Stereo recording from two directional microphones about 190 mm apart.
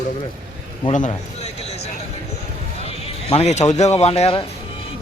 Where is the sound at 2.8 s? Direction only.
30° left (ahead or behind).